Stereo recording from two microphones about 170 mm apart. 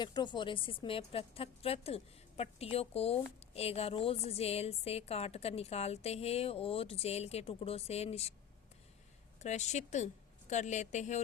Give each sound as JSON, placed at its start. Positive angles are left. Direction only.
{"t": 0.0, "sound": "a woman's voice", "side_deg": 25}
{"t": 9.4, "sound": "a woman's voice", "side_deg": 40}